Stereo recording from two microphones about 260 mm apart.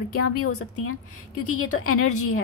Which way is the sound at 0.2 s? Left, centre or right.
Left.